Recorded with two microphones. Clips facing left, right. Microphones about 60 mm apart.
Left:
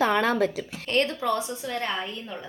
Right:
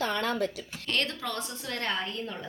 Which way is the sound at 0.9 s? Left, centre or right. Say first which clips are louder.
Left 7 dB; left.